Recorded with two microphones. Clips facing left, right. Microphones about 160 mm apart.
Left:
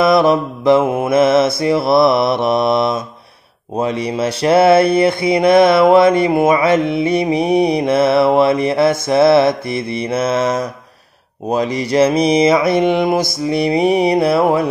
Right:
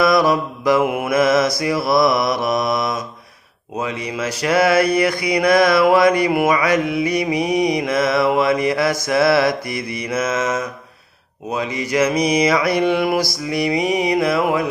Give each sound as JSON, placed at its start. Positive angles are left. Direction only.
{"t": 0.0, "sound": "mantra", "side_deg": 25}